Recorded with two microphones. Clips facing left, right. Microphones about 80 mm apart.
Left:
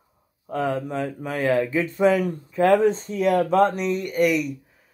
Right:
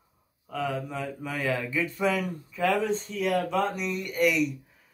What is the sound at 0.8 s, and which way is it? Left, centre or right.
Speech, left.